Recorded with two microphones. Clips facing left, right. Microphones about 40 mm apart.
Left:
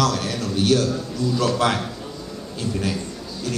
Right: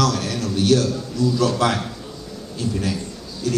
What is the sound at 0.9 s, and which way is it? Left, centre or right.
Speech, centre.